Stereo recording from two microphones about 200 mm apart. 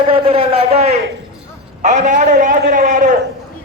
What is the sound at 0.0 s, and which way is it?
A man's voice, 25° right (ahead or behind).